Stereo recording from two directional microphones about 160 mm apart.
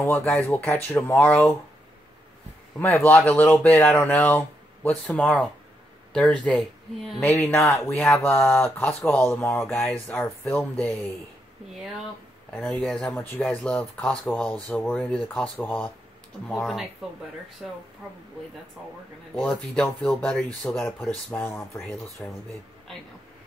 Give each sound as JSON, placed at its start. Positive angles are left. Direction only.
{"t": 0.0, "sound": "speech", "side_deg": 10}
{"t": 2.8, "sound": "speech", "side_deg": 10}
{"t": 12.5, "sound": "speech", "side_deg": 5}
{"t": 19.4, "sound": "speech", "side_deg": 5}
{"t": 22.2, "sound": "speech", "side_deg": 5}